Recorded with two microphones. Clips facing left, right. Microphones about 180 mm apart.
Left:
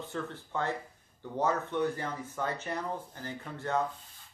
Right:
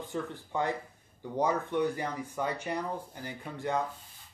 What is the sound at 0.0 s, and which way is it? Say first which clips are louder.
Speech: right 2 dB; 15° right (ahead or behind).